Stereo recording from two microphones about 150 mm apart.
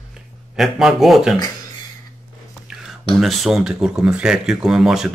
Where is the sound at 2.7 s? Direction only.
5° right (ahead or behind).